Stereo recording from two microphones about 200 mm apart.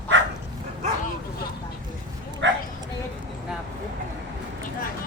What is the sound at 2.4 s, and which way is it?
Speech, 65° right (ahead or behind).